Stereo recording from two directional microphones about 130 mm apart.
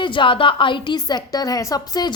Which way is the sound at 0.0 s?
40° left (ahead or behind).